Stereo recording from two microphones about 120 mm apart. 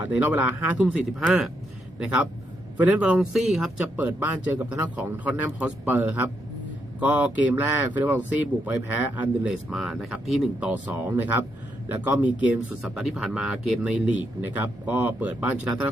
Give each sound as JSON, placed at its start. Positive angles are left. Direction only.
{"t": 0.0, "sound": "speech", "side_deg": -15}
{"t": 3.9, "sound": "speech", "side_deg": -15}
{"t": 10.7, "sound": "speech", "side_deg": -15}